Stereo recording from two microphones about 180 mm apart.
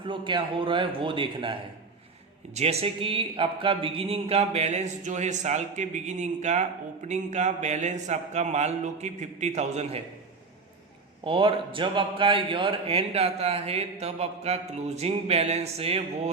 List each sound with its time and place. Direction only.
0.0 s a man's voice: 25° right (ahead or behind)
2.6 s a man's voice: 35° right (ahead or behind)
11.2 s a man's voice: 30° right (ahead or behind)